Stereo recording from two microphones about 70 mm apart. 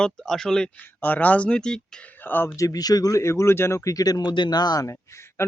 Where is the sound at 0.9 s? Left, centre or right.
Left; by 2.1 s centre.